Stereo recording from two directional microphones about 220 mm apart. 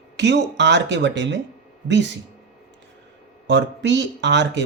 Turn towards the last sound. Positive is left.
turn(degrees=-55)  # may be behind; listen again after turning